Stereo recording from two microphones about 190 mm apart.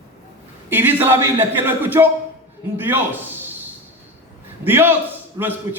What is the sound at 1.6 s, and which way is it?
A man's voice, 10° right (ahead or behind).